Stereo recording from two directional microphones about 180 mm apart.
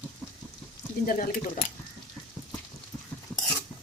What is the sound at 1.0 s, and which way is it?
Speech, 50° left (ahead or behind).